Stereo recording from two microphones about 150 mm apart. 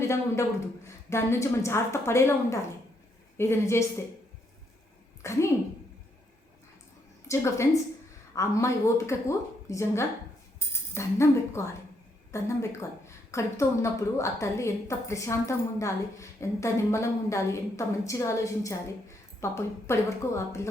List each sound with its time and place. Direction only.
0.0 s a man's voice: 20° left (ahead or behind)
5.2 s a woman's voice: 20° left (ahead or behind)
7.3 s a woman's voice: 20° left (ahead or behind)